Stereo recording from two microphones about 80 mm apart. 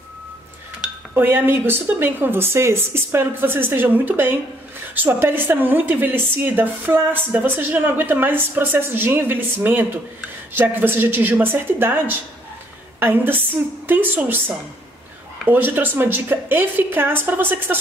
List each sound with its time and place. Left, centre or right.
1.1 s a woman's voice: right
15.4 s a woman's voice: right